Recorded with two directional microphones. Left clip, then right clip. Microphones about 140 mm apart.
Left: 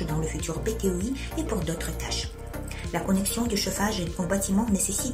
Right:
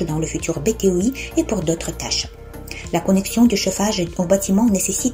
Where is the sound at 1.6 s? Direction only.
25° right (ahead or behind).